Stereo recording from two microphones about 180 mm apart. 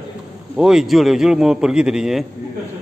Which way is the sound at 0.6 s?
5° right (ahead or behind).